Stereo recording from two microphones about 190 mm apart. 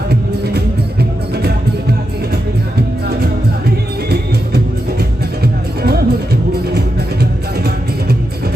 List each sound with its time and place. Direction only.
0.1 s music: 55° right (ahead or behind)